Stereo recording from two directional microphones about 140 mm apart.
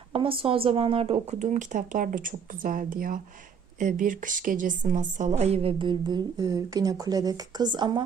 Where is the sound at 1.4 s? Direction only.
60° right (ahead or behind).